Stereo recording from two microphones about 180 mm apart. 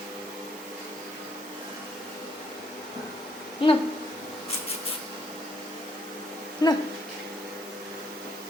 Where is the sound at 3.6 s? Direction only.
30° left (ahead or behind).